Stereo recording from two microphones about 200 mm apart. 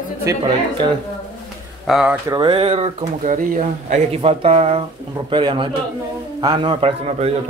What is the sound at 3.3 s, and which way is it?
Speech, 40° right (ahead or behind).